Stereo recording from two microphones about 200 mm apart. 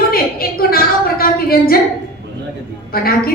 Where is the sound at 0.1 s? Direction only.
50° left (ahead or behind).